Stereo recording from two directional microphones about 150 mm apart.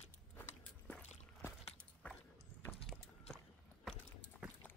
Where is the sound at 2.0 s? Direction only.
10° left (ahead or behind).